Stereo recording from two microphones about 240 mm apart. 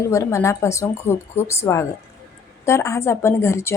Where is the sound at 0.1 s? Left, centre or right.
Centre.